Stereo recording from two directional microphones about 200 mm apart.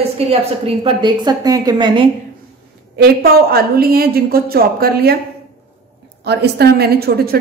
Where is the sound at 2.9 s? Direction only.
50° right (ahead or behind).